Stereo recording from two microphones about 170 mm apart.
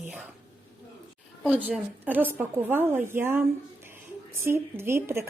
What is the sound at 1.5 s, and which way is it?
Speech, 10° right (ahead or behind).